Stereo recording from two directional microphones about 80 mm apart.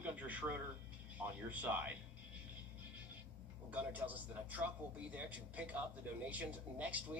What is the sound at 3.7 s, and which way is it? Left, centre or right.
Speech, centre.